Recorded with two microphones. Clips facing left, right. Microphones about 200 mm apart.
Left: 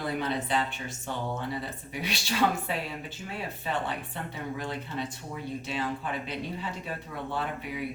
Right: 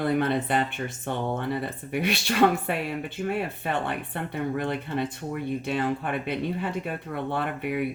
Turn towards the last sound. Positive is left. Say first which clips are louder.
# right 6 dB
turn(degrees=-60)  # may be behind; listen again after turning